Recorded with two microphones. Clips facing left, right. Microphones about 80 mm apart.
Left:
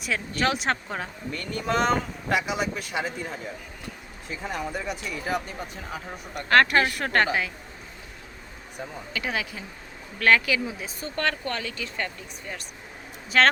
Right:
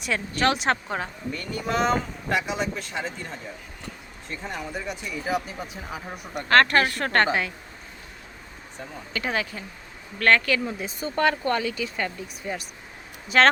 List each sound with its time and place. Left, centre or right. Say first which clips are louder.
0.0 s speech: right 2 dB; centre
6.5 s a woman's voice: right 1 dB; centre
9.1 s speech: right 3 dB; centre
11.1 s speech: right 6 dB; centre